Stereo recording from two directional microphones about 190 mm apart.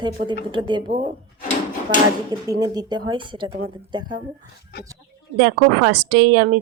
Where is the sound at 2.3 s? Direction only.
20° right (ahead or behind).